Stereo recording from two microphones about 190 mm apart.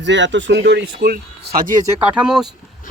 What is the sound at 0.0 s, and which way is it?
Speech, 70° right (ahead or behind).